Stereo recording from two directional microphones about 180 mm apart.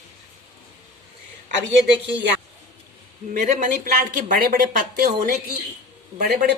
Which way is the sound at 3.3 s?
50° right (ahead or behind).